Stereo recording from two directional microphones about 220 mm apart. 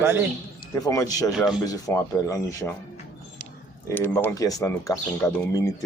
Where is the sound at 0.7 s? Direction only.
15° left (ahead or behind).